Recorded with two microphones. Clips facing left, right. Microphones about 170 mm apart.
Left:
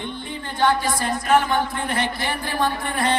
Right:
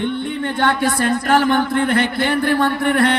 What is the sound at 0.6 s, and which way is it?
Speech, 65° right (ahead or behind).